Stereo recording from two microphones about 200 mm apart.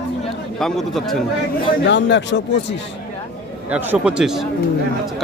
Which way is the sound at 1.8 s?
60° left (ahead or behind).